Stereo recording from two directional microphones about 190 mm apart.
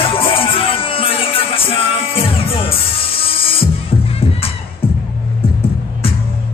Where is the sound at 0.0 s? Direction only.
30° left (ahead or behind).